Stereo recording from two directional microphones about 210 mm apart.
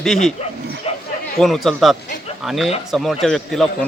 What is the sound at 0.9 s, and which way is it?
Chatter, 30° left (ahead or behind).